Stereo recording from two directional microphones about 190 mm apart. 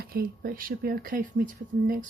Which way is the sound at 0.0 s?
50° right (ahead or behind).